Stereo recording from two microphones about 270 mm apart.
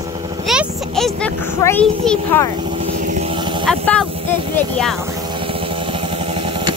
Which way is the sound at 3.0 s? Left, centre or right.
Right.